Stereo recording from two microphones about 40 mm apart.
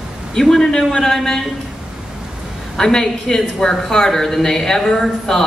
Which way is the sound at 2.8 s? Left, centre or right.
Centre.